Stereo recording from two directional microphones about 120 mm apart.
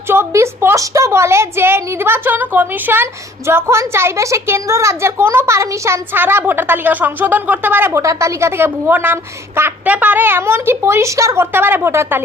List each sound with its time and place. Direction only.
0.1 s a woman's voice: 20° right (ahead or behind)